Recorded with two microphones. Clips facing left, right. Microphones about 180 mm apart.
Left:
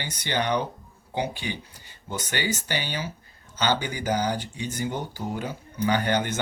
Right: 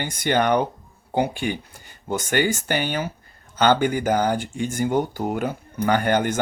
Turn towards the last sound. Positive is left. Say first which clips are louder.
# right 4 dB
turn(degrees=-50)  # may be behind; listen again after turning